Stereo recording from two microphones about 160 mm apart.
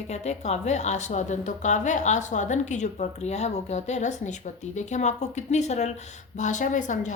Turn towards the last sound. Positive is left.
turn(degrees=50)  # may be behind; listen again after turning